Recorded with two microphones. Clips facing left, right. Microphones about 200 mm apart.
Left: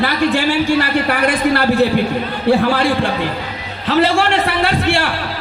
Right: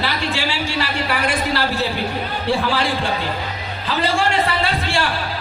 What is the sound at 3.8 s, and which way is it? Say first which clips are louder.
A man's voice: left 6 dB; 65° left (ahead or behind).